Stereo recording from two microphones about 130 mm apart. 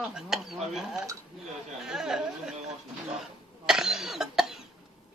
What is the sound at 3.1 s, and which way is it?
Cough, 5° right (ahead or behind).